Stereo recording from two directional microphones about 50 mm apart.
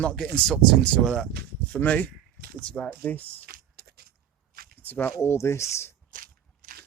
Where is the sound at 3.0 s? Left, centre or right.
Left.